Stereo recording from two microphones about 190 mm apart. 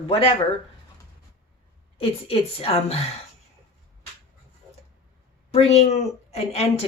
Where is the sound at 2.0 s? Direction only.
30° left (ahead or behind).